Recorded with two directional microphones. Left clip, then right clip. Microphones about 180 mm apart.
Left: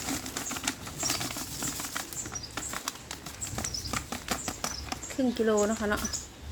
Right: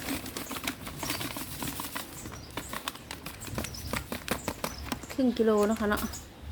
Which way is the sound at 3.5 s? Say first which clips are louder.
Left 2 dB; 35° right (ahead or behind).